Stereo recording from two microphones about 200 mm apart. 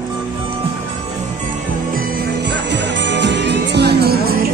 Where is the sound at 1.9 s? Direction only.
55° right (ahead or behind).